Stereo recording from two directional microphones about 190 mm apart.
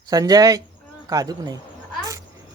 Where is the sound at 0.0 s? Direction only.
20° right (ahead or behind).